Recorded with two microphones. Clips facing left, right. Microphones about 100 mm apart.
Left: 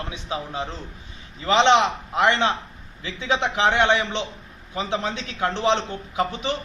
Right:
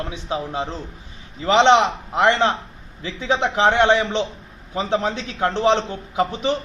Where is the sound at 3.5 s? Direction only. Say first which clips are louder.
Right 4 dB; 40° right (ahead or behind).